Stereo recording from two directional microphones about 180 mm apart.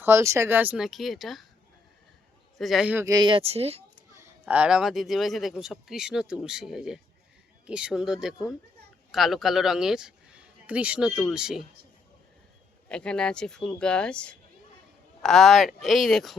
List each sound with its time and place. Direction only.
0.0 s speech: 15° right (ahead or behind); by 1.5 s centre (ahead or behind)
2.6 s speech: centre (ahead or behind)
3.1 s speech: 25° right (ahead or behind)
4.1 s speech: 10° right (ahead or behind)
12.9 s speech: 5° left (ahead or behind)